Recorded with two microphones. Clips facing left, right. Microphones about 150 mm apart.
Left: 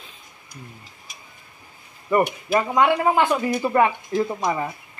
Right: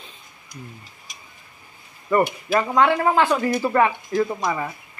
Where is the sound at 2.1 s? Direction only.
15° left (ahead or behind).